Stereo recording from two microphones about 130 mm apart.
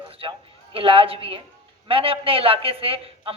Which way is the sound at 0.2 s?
45° right (ahead or behind).